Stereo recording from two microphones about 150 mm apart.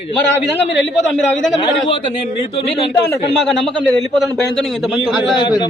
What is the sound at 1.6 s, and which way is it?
Speech, 35° left (ahead or behind).